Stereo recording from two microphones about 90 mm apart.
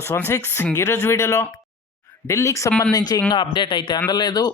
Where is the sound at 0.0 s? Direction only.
30° left (ahead or behind).